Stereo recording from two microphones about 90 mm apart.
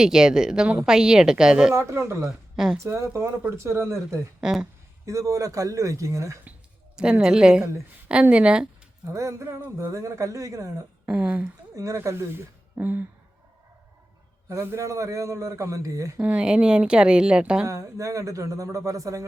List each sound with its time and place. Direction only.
0.0 s a woman's voice: 10° right (ahead or behind)
1.7 s a man's voice: 30° right (ahead or behind)
4.4 s a woman's voice: 10° right (ahead or behind)
5.0 s a man's voice: 35° right (ahead or behind)
6.9 s a woman's voice: 10° right (ahead or behind)
9.1 s a man's voice: 30° right (ahead or behind)
11.1 s a woman's voice: 15° right (ahead or behind)
11.7 s a woman's voice: 35° right (ahead or behind); by 13.1 s 20° right (ahead or behind)
14.5 s a man's voice: 30° right (ahead or behind)
16.2 s a woman's voice: 15° right (ahead or behind)
17.7 s a man's voice: 35° right (ahead or behind)